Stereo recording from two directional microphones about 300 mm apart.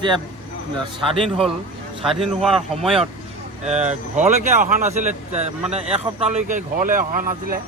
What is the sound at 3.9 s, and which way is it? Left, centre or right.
Speech, right.